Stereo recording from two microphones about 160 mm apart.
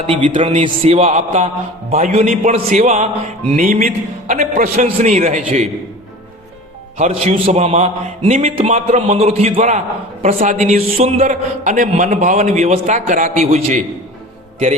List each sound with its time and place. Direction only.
0.3 s a man's voice: 40° right (ahead or behind)
7.3 s a man's voice: 45° right (ahead or behind)